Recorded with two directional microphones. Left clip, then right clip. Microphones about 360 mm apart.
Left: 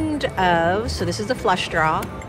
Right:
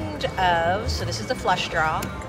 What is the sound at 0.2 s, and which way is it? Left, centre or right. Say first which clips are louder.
Music: left 2 dB; centre.